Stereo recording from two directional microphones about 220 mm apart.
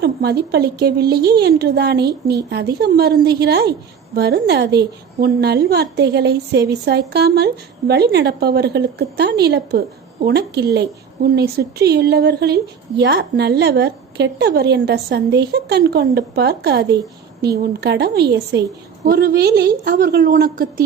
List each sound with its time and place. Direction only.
0.0 s a woman's voice: 50° right (ahead or behind)